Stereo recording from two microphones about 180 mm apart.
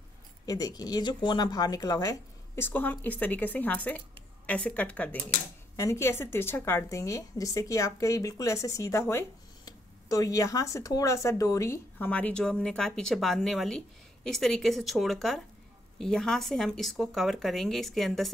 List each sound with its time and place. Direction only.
0.5 s speech: 20° left (ahead or behind); by 18.3 s centre (ahead or behind)